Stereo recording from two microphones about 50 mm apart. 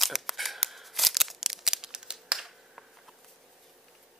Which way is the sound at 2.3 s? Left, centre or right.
Centre.